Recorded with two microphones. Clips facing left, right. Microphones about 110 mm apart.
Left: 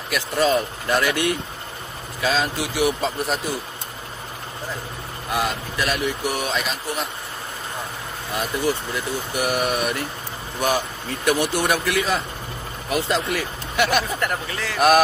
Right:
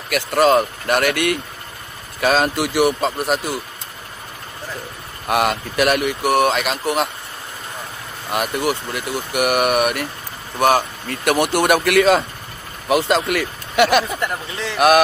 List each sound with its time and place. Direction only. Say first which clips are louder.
0.1 s speech: right 5 dB; 70° right (ahead or behind)
5.3 s speech: right 6 dB; 70° right (ahead or behind)
8.3 s speech: right 3 dB; 70° right (ahead or behind)
14.2 s a man's voice: right 1 dB; 25° right (ahead or behind)